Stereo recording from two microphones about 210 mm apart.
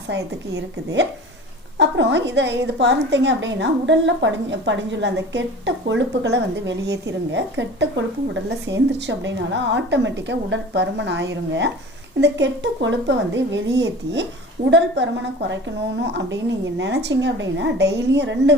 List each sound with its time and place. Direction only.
1.8 s a woman's voice: 55° right (ahead or behind)